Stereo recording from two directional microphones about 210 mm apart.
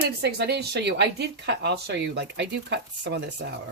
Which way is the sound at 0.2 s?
50° right (ahead or behind).